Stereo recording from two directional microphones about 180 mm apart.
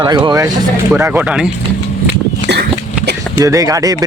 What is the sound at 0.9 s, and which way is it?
Speech, 10° right (ahead or behind).